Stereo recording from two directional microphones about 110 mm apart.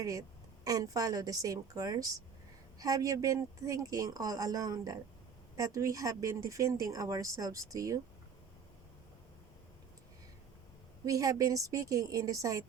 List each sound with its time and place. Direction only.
0.6 s speech: 35° right (ahead or behind)
11.0 s speech: 30° right (ahead or behind)